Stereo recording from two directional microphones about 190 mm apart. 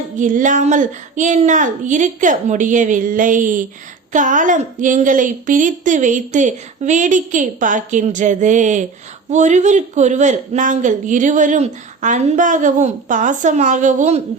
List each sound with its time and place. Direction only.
0.2 s a woman's voice: 40° right (ahead or behind)